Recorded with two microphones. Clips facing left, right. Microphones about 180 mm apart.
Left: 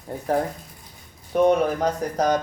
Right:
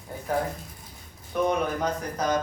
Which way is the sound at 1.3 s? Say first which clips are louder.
Left 7 dB; 40° left (ahead or behind).